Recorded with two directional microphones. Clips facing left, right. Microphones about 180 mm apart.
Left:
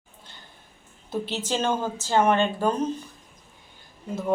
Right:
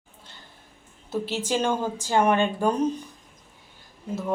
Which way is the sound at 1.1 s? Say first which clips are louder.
Right 1 dB; 5° right (ahead or behind).